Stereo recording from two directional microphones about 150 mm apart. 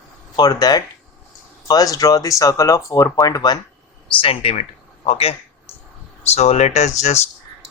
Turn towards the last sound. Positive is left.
turn(degrees=50)  # may be behind; listen again after turning